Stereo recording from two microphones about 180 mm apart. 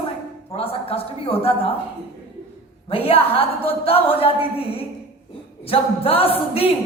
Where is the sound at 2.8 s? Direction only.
30° left (ahead or behind).